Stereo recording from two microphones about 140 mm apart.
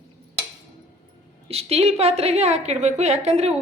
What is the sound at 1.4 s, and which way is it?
A woman's voice, 45° right (ahead or behind).